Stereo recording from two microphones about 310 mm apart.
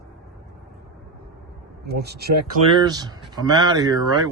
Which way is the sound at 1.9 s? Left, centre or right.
Right.